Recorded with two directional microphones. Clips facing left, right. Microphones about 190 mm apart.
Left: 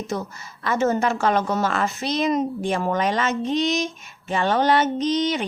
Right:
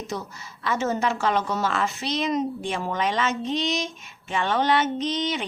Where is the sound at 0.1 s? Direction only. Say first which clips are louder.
Left 4 dB; 50° left (ahead or behind).